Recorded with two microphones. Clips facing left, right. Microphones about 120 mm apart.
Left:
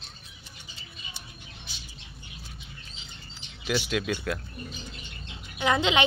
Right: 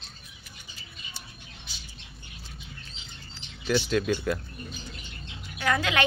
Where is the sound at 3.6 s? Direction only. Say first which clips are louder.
Right 3 dB; 5° left (ahead or behind).